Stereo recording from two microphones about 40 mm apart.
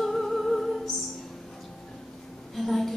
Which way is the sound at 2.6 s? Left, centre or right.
Centre.